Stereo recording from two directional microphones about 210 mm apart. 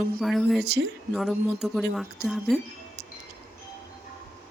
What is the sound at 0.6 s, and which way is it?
Speech, 55° right (ahead or behind).